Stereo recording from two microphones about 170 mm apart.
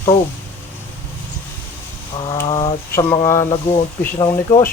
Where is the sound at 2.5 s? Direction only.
35° left (ahead or behind).